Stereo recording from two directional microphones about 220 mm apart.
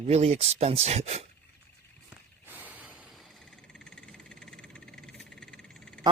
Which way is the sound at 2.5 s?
5° right (ahead or behind).